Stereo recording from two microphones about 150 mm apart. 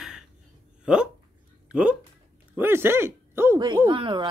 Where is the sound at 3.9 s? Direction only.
30° right (ahead or behind).